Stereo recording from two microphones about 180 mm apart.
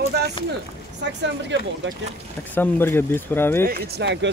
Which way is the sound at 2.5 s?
10° left (ahead or behind).